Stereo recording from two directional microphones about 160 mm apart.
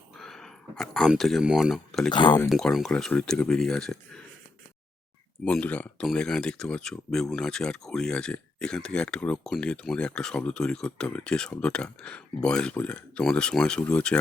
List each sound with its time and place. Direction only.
0.2 s speech: 5° left (ahead or behind)
2.1 s speech: 30° left (ahead or behind)
2.5 s speech: centre (ahead or behind)
5.5 s speech: 5° left (ahead or behind)